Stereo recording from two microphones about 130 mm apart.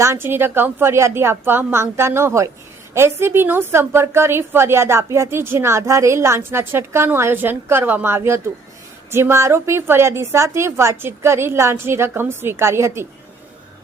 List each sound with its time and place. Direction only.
0.0 s a woman's voice: 20° right (ahead or behind)